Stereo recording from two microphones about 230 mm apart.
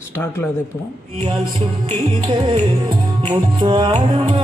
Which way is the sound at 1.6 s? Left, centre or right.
Right.